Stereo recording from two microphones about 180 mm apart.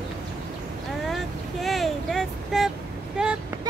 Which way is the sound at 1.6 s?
Centre (ahead or behind).